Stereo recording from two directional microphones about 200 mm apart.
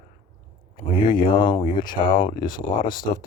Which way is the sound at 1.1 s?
25° left (ahead or behind).